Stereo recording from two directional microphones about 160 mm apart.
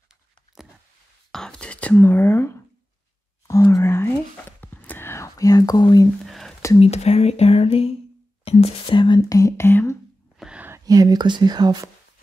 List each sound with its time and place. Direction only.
1.3 s whispering: 5° left (ahead or behind)
3.4 s speech: 20° left (ahead or behind)
6.2 s whispering: centre (ahead or behind)
6.8 s speech: 40° left (ahead or behind); by 9.9 s 15° left (ahead or behind)
10.3 s a sound: 5° right (ahead or behind)
10.9 s speech: 25° right (ahead or behind)